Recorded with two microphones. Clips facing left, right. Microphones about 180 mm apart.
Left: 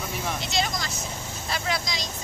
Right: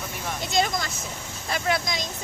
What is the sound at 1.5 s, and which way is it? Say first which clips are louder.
Speech: right 4 dB; 50° right (ahead or behind).